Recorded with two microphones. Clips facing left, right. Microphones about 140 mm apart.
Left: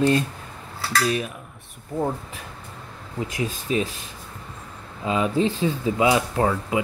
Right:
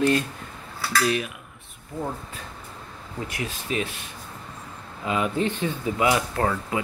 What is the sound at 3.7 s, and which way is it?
Cutlery, 35° left (ahead or behind).